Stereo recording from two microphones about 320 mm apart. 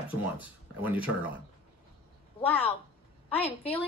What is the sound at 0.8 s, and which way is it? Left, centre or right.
Speech, centre.